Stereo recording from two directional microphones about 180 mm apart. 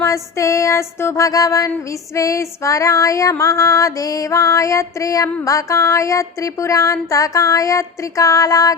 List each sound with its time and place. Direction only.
0.0 s female singing: 15° left (ahead or behind)